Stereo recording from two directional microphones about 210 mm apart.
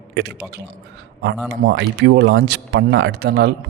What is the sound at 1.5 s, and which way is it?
Speech, 55° right (ahead or behind).